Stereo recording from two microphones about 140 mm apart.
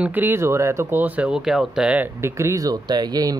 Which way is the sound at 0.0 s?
15° right (ahead or behind).